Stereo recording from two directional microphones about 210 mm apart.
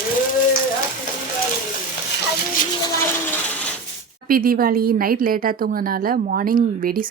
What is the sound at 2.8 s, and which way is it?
Speech, 10° left (ahead or behind).